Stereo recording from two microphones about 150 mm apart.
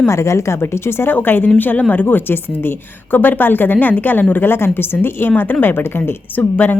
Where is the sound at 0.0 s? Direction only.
20° left (ahead or behind).